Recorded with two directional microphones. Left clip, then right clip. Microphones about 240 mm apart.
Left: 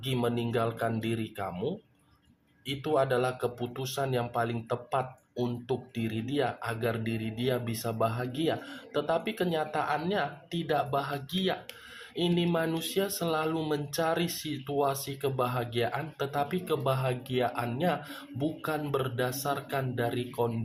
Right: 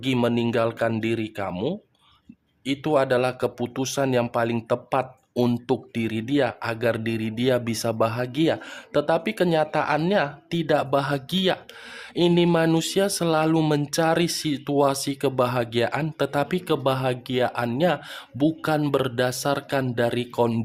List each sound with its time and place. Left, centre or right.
0.0 s speech: right